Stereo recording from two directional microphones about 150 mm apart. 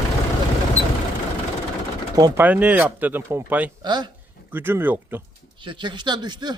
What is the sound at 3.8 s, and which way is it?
Speech, 30° right (ahead or behind).